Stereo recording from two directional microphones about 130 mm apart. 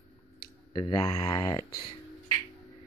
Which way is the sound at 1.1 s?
25° left (ahead or behind).